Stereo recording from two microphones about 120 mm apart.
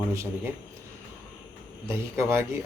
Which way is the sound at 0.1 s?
25° right (ahead or behind).